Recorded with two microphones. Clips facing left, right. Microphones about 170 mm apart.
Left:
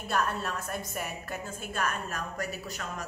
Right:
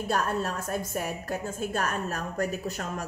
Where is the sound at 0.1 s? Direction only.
40° right (ahead or behind).